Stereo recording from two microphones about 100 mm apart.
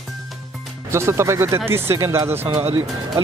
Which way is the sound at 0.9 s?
30° right (ahead or behind).